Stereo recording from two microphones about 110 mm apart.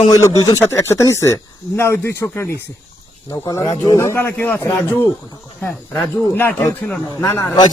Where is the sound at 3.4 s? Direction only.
30° left (ahead or behind).